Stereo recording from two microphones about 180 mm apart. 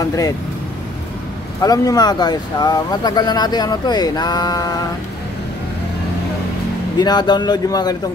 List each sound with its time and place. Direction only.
0.0 s speech: 20° left (ahead or behind)
1.6 s speech: 20° left (ahead or behind)
7.0 s speech: 25° left (ahead or behind)